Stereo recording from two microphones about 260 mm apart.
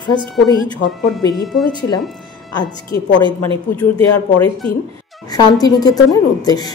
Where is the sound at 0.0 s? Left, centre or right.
Centre.